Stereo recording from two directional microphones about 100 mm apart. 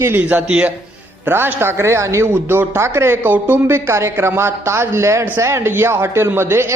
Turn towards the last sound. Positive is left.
turn(degrees=-25)  # may be behind; listen again after turning